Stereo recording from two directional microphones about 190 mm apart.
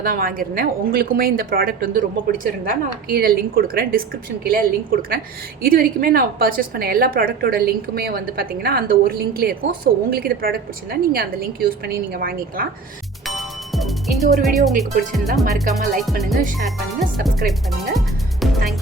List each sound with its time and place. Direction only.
0.0 s a woman's voice: 50° right (ahead or behind)
13.2 s speech: centre (ahead or behind)
16.0 s music: centre (ahead or behind)